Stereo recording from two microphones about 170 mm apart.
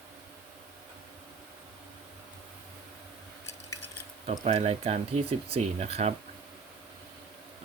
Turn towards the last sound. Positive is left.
turn(degrees=-40)  # may be behind; listen again after turning